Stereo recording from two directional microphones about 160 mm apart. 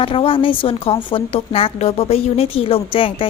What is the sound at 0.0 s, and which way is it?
Speech, 35° left (ahead or behind).